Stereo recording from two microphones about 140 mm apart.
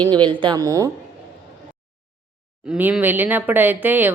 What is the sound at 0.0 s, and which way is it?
Speech, 30° right (ahead or behind).